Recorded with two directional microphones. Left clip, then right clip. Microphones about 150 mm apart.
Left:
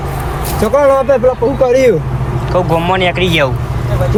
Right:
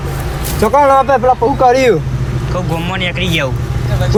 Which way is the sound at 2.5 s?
5° right (ahead or behind).